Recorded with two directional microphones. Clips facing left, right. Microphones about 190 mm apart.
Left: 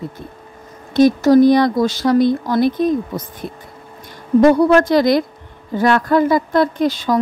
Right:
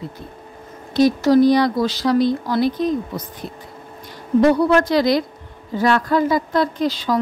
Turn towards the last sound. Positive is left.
turn(degrees=50)  # may be behind; listen again after turning